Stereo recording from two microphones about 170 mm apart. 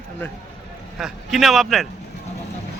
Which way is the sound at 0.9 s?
Centre (ahead or behind).